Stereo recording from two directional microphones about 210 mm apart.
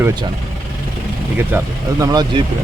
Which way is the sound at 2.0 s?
20° right (ahead or behind).